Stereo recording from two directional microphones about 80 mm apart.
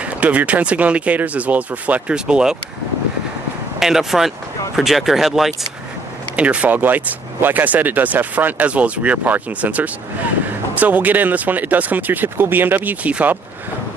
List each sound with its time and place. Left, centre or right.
0.0 s speech: centre
3.8 s speech: centre
6.3 s speech: centre